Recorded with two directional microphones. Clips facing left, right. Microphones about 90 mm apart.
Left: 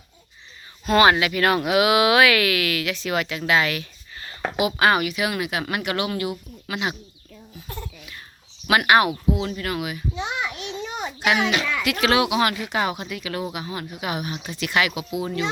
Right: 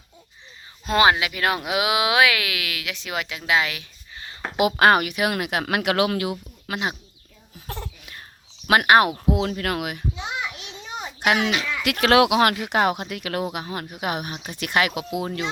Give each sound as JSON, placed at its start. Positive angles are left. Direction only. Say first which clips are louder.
{"t": 0.9, "sound": "speech", "louder": "left 2 dB", "side_deg": -15}
{"t": 4.5, "sound": "speech", "louder": "right 3 dB", "side_deg": -55}
{"t": 6.7, "sound": "speech", "louder": "even", "side_deg": -40}
{"t": 8.6, "sound": "speech", "louder": "right 1 dB", "side_deg": -45}
{"t": 9.3, "sound": "speech", "louder": "right 2 dB", "side_deg": -75}
{"t": 11.2, "sound": "a child's voice", "louder": "even", "side_deg": -50}
{"t": 12.2, "sound": "speech", "louder": "right 3 dB", "side_deg": -65}